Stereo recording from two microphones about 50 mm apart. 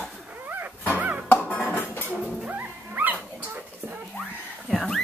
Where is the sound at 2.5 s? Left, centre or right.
Right.